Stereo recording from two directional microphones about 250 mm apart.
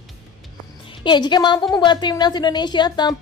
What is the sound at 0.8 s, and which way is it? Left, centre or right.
A woman's voice, centre.